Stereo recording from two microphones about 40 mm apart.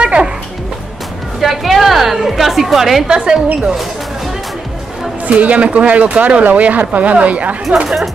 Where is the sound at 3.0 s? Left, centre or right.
Centre.